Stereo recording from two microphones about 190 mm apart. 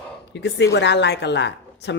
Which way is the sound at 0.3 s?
65° left (ahead or behind).